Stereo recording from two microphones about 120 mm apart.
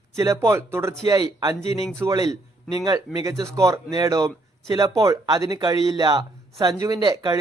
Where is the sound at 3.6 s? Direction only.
30° right (ahead or behind).